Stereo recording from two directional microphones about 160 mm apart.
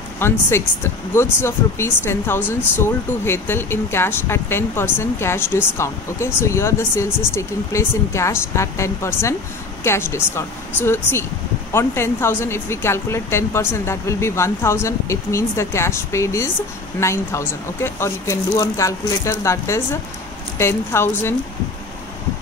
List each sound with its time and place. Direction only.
0.2 s speech: 15° left (ahead or behind)